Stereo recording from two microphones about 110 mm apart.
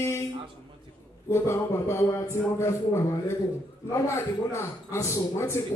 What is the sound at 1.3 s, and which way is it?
A man's voice, 25° left (ahead or behind).